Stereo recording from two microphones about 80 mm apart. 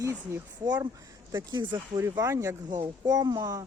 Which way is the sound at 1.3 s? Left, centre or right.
Right.